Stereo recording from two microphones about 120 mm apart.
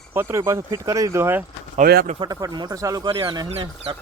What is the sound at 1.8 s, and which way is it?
Speech, 90° right.